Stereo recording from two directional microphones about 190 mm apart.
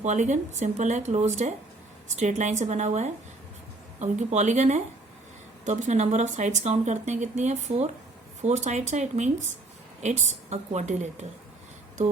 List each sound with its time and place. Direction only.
0.0 s speech: 40° right (ahead or behind)